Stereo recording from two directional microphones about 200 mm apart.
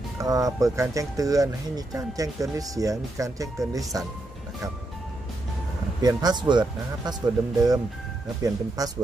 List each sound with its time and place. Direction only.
0.2 s speech: 15° right (ahead or behind)
6.0 s speech: 20° right (ahead or behind)